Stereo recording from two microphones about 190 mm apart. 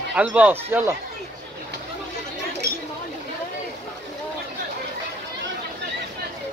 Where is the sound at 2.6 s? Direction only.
60° right (ahead or behind).